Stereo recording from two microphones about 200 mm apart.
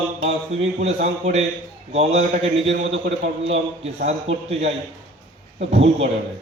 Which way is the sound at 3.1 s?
70° right (ahead or behind).